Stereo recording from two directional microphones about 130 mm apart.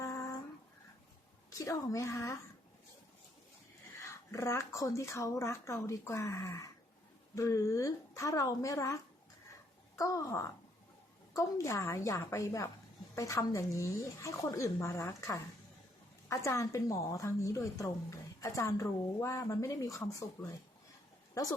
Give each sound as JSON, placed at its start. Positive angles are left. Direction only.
{"t": 0.0, "sound": "a sound", "side_deg": 25}
{"t": 1.5, "sound": "a woman's voice", "side_deg": 25}
{"t": 3.9, "sound": "a woman's voice", "side_deg": 20}